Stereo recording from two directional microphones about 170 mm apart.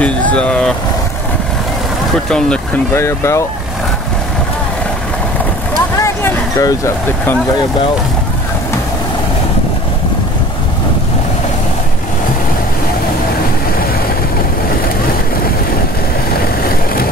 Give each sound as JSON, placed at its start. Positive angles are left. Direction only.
{"t": 0.3, "sound": "speech", "side_deg": 5}
{"t": 2.1, "sound": "speech", "side_deg": 5}
{"t": 5.9, "sound": "a sound", "side_deg": 20}
{"t": 16.6, "sound": "vehicle", "side_deg": 60}